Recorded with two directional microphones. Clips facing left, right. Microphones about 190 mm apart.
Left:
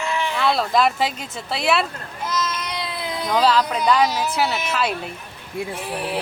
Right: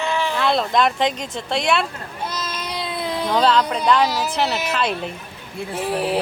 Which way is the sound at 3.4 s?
5° left (ahead or behind).